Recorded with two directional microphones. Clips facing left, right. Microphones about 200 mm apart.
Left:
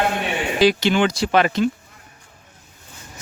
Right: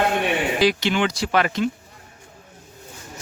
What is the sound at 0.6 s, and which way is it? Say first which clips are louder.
Speech: left 6 dB; 30° left (ahead or behind).